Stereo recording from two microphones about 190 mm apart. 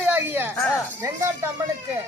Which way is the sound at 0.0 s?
10° right (ahead or behind).